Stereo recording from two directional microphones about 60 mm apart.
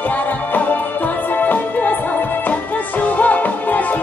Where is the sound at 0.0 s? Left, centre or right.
Left.